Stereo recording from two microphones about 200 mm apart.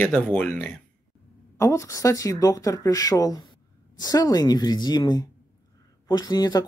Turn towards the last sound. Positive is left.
turn(degrees=20)  # may be behind; listen again after turning